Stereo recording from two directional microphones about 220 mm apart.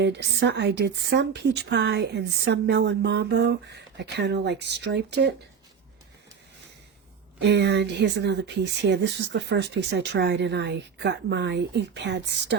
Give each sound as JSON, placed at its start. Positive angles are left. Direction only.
{"t": 0.0, "sound": "a woman's voice", "side_deg": -50}
{"t": 7.4, "sound": "a woman's voice", "side_deg": -50}